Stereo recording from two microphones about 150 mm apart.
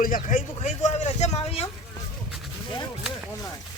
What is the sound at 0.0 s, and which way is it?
Speech, 65° left (ahead or behind).